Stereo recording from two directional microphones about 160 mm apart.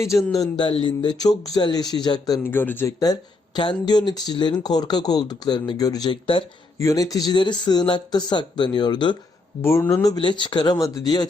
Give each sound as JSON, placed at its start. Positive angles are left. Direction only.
{"t": 0.0, "sound": "speech", "side_deg": 20}
{"t": 0.5, "sound": "speech", "side_deg": 30}
{"t": 2.4, "sound": "speech", "side_deg": 15}
{"t": 6.7, "sound": "speech", "side_deg": 20}
{"t": 9.6, "sound": "speech", "side_deg": 15}